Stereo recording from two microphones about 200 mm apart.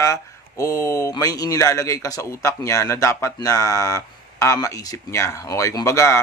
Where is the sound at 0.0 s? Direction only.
15° left (ahead or behind).